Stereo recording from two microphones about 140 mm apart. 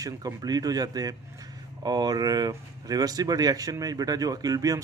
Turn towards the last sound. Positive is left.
turn(degrees=-25)  # may be behind; listen again after turning